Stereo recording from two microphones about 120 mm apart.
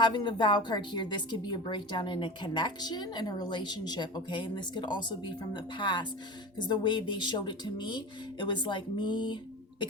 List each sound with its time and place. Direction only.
0.0 s speech: 40° left (ahead or behind)